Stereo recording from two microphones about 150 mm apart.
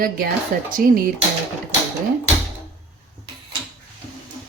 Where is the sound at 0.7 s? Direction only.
70° right (ahead or behind).